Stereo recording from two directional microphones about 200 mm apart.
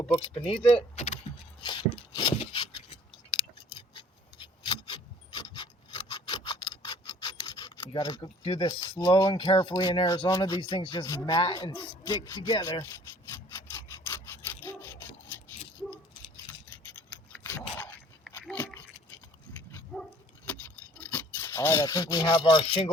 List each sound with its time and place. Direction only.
0.4 s speech: 30° left (ahead or behind)
1.6 s a sound: 20° left (ahead or behind)
3.9 s filing: 20° left (ahead or behind)
13.5 s sawing: 10° left (ahead or behind)
16.5 s a sound: 10° left (ahead or behind)
18.3 s dog: 10° left (ahead or behind)
21.0 s speech: 10° left (ahead or behind)